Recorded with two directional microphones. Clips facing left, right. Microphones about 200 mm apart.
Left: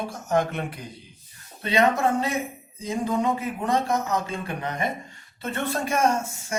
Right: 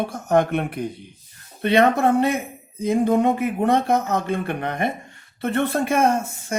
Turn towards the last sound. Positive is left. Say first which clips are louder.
# right 3 dB
turn(degrees=-55)  # may be behind; listen again after turning